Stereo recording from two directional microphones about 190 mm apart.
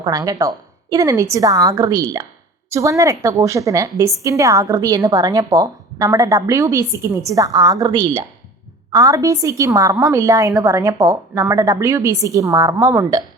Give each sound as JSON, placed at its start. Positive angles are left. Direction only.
{"t": 0.0, "sound": "a woman's voice", "side_deg": -20}